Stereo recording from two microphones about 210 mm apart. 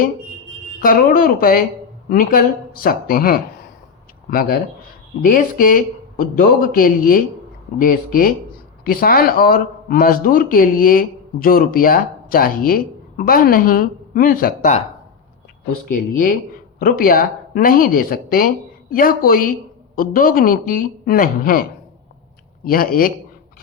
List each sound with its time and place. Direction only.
0.8 s a man's voice: 40° left (ahead or behind)
15.9 s a man's voice: 40° left (ahead or behind)